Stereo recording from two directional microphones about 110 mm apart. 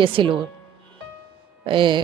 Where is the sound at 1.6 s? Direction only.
50° right (ahead or behind).